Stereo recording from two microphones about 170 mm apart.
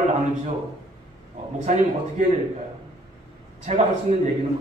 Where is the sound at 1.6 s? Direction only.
45° right (ahead or behind).